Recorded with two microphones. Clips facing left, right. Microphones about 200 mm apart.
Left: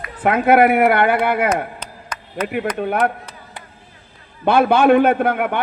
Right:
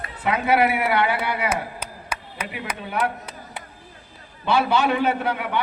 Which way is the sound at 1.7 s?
10° right (ahead or behind).